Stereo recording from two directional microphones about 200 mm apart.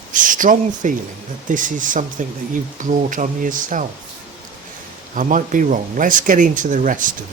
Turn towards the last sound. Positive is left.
turn(degrees=-40)  # may be behind; listen again after turning